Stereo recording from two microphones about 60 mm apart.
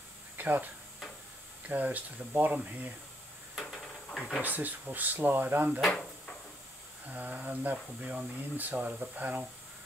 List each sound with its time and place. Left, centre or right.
0.4 s speech: right
1.7 s speech: right
3.5 s a sound: centre
4.4 s speech: right
7.1 s speech: right